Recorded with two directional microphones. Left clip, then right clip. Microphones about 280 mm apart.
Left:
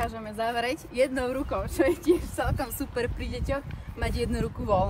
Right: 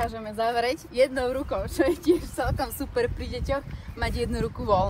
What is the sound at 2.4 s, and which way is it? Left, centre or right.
Speech, centre.